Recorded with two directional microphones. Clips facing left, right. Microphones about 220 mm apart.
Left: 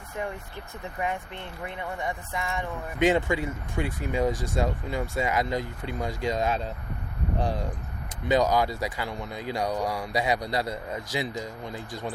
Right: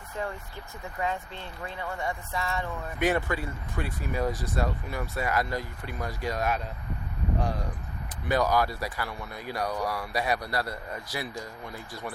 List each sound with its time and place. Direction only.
0.9 s speech: 20° left (ahead or behind)
4.3 s speech: 45° left (ahead or behind)
4.6 s speech: 20° left (ahead or behind)
8.3 s speech: 20° left (ahead or behind)